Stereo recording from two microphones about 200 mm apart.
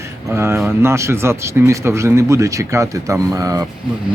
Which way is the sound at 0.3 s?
10° right (ahead or behind).